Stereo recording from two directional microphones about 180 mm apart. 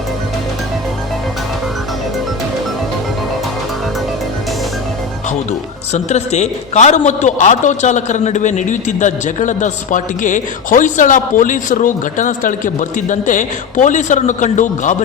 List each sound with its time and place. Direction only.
5.5 s a man's voice: 40° left (ahead or behind)